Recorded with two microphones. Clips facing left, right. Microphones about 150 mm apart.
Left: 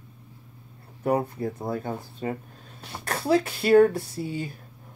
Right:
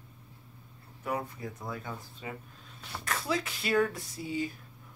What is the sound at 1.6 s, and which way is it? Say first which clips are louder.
Speech: left 7 dB; 40° left (ahead or behind).